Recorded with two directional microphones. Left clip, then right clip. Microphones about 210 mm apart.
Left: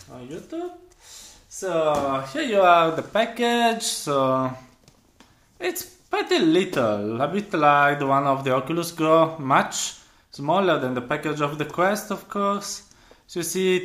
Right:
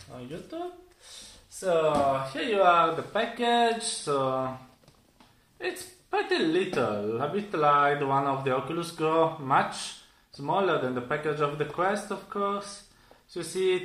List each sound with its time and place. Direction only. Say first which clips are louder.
2.3 s speech: left 6 dB; 55° left (ahead or behind)
5.6 s speech: left 6 dB; 55° left (ahead or behind)